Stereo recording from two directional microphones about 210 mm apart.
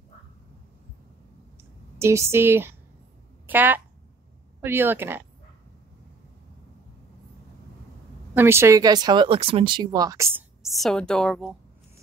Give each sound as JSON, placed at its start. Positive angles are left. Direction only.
{"t": 2.0, "sound": "speech", "side_deg": -15}
{"t": 8.4, "sound": "speech", "side_deg": -10}
{"t": 10.6, "sound": "a woman's voice", "side_deg": 0}